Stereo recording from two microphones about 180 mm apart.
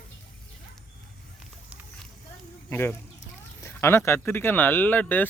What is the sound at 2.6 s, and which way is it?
Speech, 10° left (ahead or behind).